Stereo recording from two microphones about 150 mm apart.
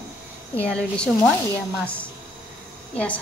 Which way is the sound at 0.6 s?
5° left (ahead or behind).